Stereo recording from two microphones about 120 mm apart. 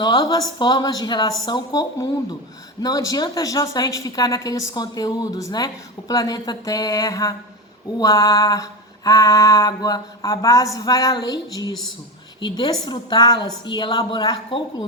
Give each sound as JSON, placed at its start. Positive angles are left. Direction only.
{"t": 0.0, "sound": "a woman's voice", "side_deg": 35}
{"t": 7.9, "sound": "mantra", "side_deg": 30}
{"t": 10.8, "sound": "a woman's voice", "side_deg": 30}